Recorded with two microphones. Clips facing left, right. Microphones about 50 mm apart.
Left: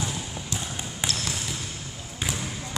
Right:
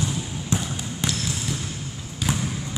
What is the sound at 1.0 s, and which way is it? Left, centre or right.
Trickle, centre.